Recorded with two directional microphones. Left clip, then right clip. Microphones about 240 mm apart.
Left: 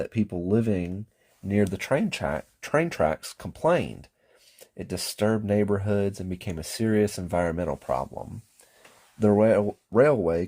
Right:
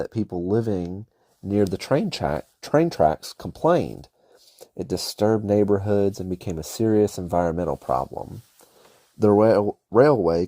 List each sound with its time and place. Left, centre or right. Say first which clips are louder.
0.0 s speech: right 2 dB; right